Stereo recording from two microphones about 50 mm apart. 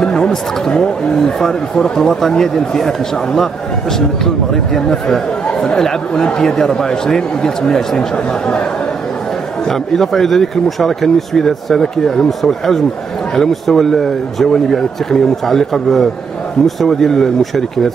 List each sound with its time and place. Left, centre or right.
0.0 s speech: centre
4.7 s speech: centre
9.7 s speech: centre